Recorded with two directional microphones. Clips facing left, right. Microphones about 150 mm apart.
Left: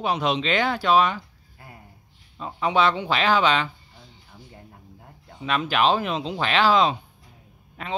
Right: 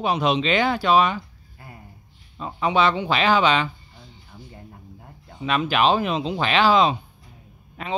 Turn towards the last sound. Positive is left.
turn(degrees=-15)  # may be behind; listen again after turning